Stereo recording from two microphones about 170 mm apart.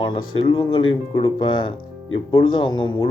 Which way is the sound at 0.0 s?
30° left (ahead or behind).